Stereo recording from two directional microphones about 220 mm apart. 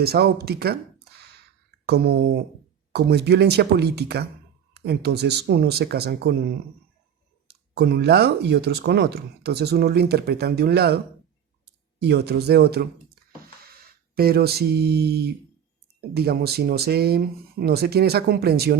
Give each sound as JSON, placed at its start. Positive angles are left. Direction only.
{"t": 0.0, "sound": "speech", "side_deg": -45}
{"t": 1.9, "sound": "speech", "side_deg": -50}
{"t": 12.0, "sound": "speech", "side_deg": -50}
{"t": 14.2, "sound": "speech", "side_deg": -45}